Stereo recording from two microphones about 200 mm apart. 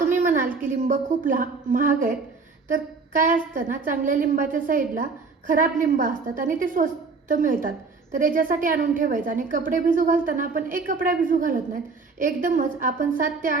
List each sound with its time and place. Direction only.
0.1 s a woman's voice: 40° right (ahead or behind)